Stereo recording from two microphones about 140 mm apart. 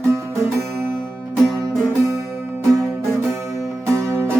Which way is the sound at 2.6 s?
20° right (ahead or behind).